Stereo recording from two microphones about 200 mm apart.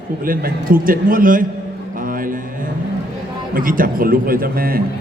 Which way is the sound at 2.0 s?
45° right (ahead or behind).